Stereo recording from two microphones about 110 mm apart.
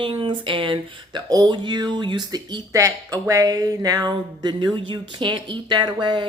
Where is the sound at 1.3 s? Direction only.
40° right (ahead or behind).